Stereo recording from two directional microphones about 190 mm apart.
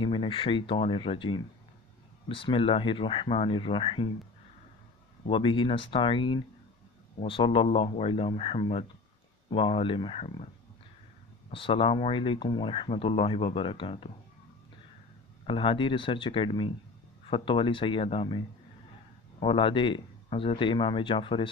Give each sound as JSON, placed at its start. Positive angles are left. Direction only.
{"t": 0.0, "sound": "speech", "side_deg": 25}
{"t": 5.3, "sound": "speech", "side_deg": 25}
{"t": 11.5, "sound": "speech", "side_deg": 30}
{"t": 15.4, "sound": "speech", "side_deg": 25}
{"t": 19.4, "sound": "speech", "side_deg": 25}